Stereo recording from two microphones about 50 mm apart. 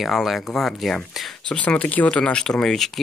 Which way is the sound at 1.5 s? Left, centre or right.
Left.